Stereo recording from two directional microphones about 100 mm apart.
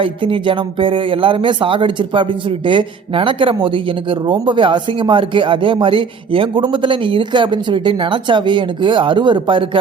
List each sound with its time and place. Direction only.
0.0 s speech: 60° right (ahead or behind)